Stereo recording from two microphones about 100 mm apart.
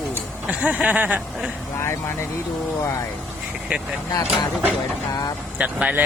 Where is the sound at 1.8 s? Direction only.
25° left (ahead or behind).